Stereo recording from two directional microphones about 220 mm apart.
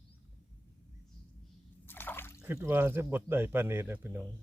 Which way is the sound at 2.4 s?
10° right (ahead or behind).